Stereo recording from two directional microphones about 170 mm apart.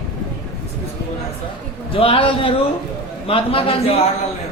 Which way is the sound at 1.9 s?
30° left (ahead or behind).